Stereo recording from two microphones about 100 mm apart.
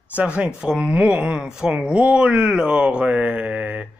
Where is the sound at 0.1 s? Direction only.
15° right (ahead or behind).